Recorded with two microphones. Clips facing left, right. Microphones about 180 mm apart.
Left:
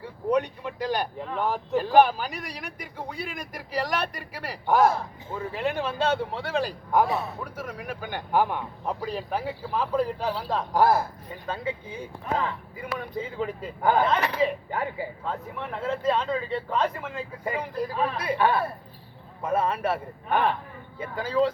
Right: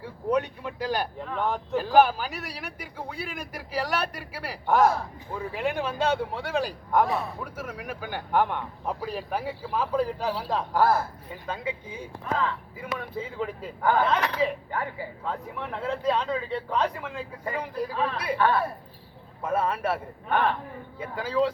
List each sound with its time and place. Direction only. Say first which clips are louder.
0.0 s a man's voice: left 1 dB; 5° right (ahead or behind)
6.9 s a man's voice: even; 5° left (ahead or behind)
8.3 s speech: left 1 dB; 5° left (ahead or behind)
9.0 s a man's voice: left 1 dB; 5° right (ahead or behind)
10.8 s speech: left 2 dB; 15° left (ahead or behind)
11.4 s a man's voice: left 1 dB; 10° right (ahead or behind)
13.8 s speech: left 1 dB; 20° left (ahead or behind)
14.1 s speech: left 1 dB; 5° left (ahead or behind)
14.7 s speech: left 2 dB; 20° left (ahead or behind)
15.2 s speech: even; centre (ahead or behind)
19.5 s speech: left 1 dB; 5° right (ahead or behind)
21.0 s a man's voice: left 1 dB; 5° right (ahead or behind)